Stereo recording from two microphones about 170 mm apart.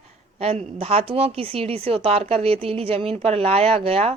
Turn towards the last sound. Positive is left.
turn(degrees=-35)  # may be behind; listen again after turning